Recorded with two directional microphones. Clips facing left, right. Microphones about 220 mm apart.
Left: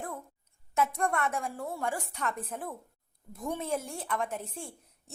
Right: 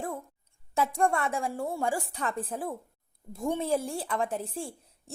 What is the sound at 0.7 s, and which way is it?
A woman's voice, 30° right (ahead or behind).